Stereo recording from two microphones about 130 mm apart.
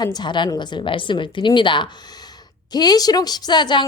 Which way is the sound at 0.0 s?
35° left (ahead or behind).